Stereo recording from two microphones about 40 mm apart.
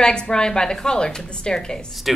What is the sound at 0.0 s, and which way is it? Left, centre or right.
A woman's voice, left.